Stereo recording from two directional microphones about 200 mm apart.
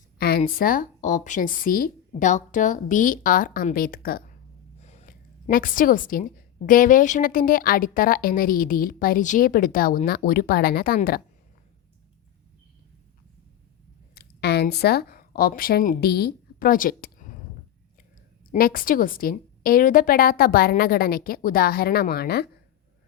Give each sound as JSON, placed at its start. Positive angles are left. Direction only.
{"t": 0.2, "sound": "speech", "side_deg": 50}
{"t": 4.8, "sound": "a sound", "side_deg": 35}
{"t": 6.7, "sound": "speech", "side_deg": 40}
{"t": 14.2, "sound": "speech", "side_deg": 55}
{"t": 18.5, "sound": "speech", "side_deg": 45}